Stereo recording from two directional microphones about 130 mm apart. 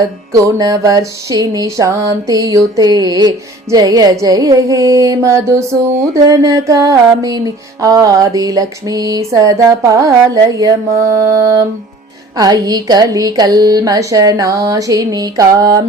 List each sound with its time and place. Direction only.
0.3 s music: 25° right (ahead or behind)